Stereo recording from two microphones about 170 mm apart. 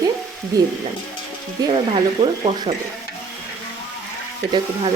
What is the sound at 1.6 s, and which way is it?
Speech, 30° right (ahead or behind).